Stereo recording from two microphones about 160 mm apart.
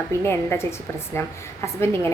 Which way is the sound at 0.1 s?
15° left (ahead or behind).